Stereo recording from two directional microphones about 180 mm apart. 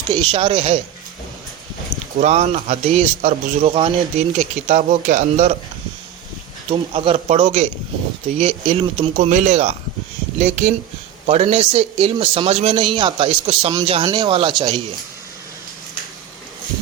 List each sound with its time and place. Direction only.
0.1 s speech: 25° right (ahead or behind)
2.2 s a man's voice: 40° right (ahead or behind)
6.7 s a man's voice: 30° right (ahead or behind)
7.4 s a man's voice: 45° right (ahead or behind); by 14.8 s 25° right (ahead or behind)